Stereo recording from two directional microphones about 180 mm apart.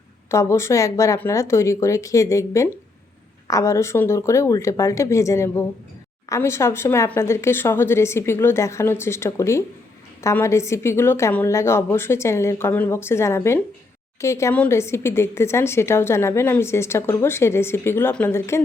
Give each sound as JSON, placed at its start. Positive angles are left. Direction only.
{"t": 0.3, "sound": "speech", "side_deg": 15}